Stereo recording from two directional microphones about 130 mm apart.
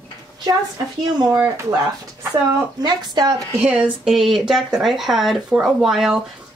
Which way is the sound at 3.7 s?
5° right (ahead or behind).